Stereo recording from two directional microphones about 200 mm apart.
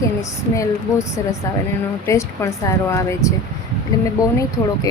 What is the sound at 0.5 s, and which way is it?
Speech, 15° left (ahead or behind).